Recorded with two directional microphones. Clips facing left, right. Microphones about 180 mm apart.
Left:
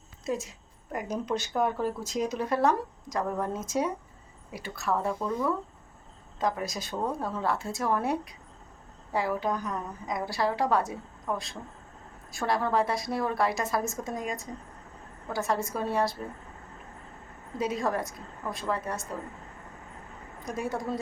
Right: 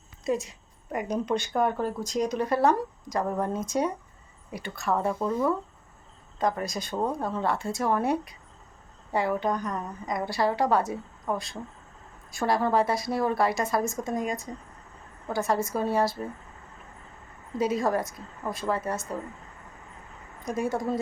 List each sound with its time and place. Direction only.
0.3 s a woman's voice: centre (ahead or behind)
6.4 s a woman's voice: centre (ahead or behind)
6.9 s speech: 15° right (ahead or behind)
7.3 s a woman's voice: centre (ahead or behind)
17.6 s a woman's voice: centre (ahead or behind)
20.4 s a woman's voice: centre (ahead or behind)